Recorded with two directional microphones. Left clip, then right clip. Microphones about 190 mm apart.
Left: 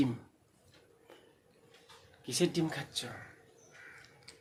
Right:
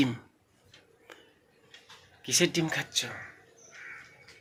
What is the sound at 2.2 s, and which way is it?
Speech, 15° right (ahead or behind).